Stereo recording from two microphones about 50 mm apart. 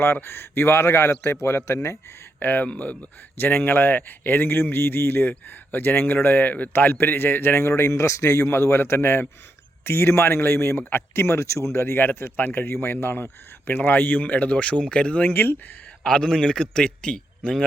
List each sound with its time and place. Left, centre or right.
0.0 s a man's voice: left
2.4 s speech: left
3.3 s a man's voice: left
15.3 s speech: left
16.0 s a man's voice: centre